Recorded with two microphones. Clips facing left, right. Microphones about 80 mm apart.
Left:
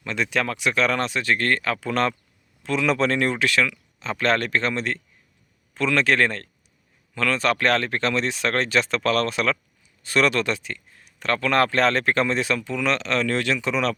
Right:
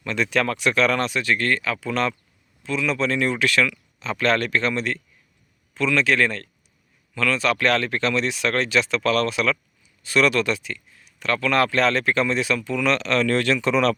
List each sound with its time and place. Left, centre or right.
0.0 s speech: left
2.6 s speech: left
3.3 s speech: left
5.7 s speech: left; by 13.9 s centre